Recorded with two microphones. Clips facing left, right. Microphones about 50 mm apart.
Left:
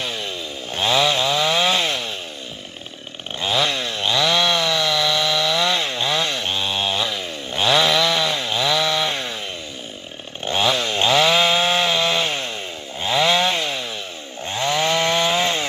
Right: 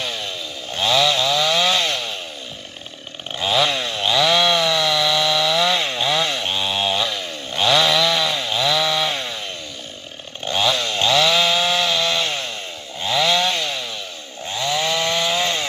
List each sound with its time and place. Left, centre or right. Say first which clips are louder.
0.0 s chainsaw: even; centre
3.3 s chainsaw: right 2 dB; centre
10.4 s chainsaw: even; centre
14.5 s chainsaw: left 2 dB; left